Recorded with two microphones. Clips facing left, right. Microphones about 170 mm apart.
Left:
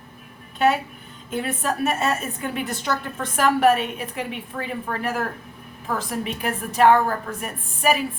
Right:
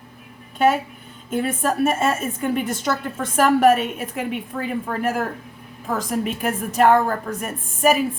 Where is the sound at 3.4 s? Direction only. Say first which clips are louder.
Right 3 dB; 45° right (ahead or behind).